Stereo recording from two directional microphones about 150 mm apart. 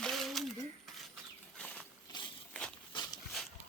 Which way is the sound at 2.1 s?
30° left (ahead or behind).